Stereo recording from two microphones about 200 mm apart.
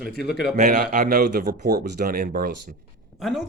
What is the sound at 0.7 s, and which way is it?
Speech, 50° right (ahead or behind).